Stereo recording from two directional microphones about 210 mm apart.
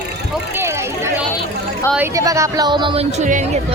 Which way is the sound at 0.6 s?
10° right (ahead or behind).